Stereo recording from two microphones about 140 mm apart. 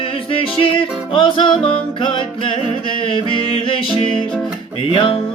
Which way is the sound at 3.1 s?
40° left (ahead or behind).